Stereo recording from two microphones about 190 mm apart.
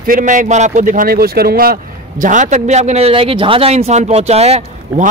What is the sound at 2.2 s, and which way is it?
A man's voice, 40° right (ahead or behind).